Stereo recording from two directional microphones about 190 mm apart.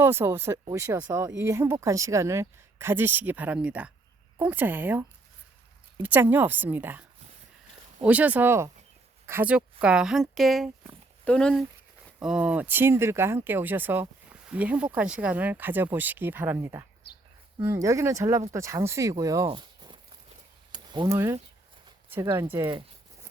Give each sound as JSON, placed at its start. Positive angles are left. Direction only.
{"t": 0.0, "sound": "speech", "side_deg": -10}
{"t": 8.0, "sound": "speech", "side_deg": -10}
{"t": 17.0, "sound": "a sound", "side_deg": 60}
{"t": 17.6, "sound": "speech", "side_deg": -15}
{"t": 19.5, "sound": "crumpling", "side_deg": -25}
{"t": 20.7, "sound": "speech", "side_deg": -25}